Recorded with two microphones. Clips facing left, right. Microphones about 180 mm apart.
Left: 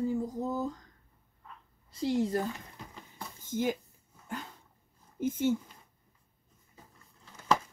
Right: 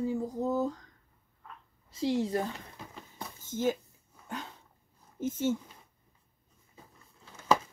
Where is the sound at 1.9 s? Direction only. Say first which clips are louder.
Even; centre (ahead or behind).